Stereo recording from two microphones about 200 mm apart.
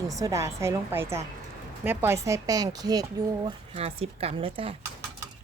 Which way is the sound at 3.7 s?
30° right (ahead or behind).